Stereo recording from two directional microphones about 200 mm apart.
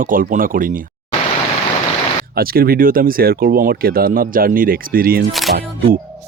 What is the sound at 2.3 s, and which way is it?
Speech, 50° right (ahead or behind).